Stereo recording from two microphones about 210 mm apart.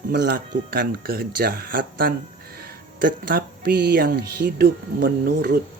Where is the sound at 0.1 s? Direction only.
50° right (ahead or behind).